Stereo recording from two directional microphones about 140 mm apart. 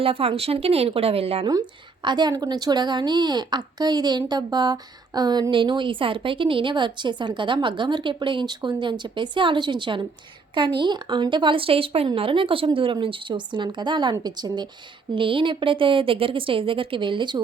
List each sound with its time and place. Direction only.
0.0 s speech: 45° right (ahead or behind)
1.5 s a woman's voice: 30° right (ahead or behind)